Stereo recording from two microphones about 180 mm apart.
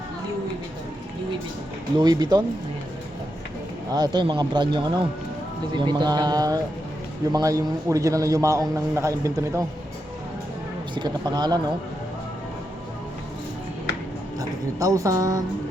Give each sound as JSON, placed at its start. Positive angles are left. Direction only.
{"t": 2.0, "sound": "speech", "side_deg": -25}
{"t": 3.9, "sound": "a man's voice", "side_deg": -25}
{"t": 10.9, "sound": "speech", "side_deg": -25}
{"t": 14.3, "sound": "speech", "side_deg": -20}